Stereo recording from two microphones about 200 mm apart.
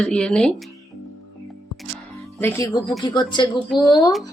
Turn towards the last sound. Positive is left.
turn(degrees=20)  # may be behind; listen again after turning